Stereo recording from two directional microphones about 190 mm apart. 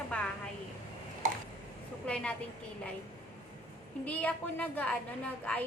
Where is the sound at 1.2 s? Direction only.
40° right (ahead or behind).